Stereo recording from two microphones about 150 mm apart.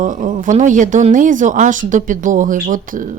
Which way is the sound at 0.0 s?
60° right (ahead or behind).